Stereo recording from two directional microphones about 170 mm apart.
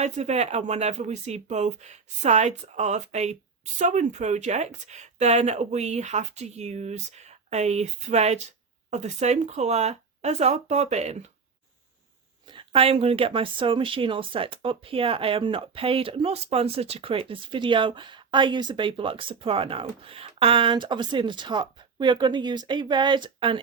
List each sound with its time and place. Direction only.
0.0 s speech: 40° right (ahead or behind)
12.5 s speech: 30° right (ahead or behind)